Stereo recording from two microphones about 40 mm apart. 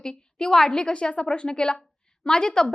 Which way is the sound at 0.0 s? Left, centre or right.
Centre.